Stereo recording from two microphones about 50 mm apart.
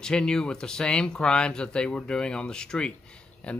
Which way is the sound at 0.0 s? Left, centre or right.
Centre.